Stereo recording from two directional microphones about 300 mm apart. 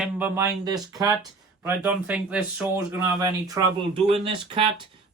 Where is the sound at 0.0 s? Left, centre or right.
Centre.